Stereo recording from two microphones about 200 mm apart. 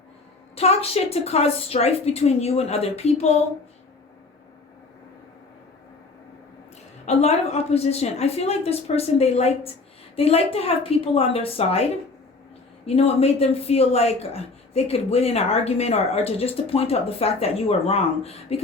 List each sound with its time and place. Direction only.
0.5 s a woman's voice: 30° left (ahead or behind)
7.0 s a woman's voice: 35° left (ahead or behind)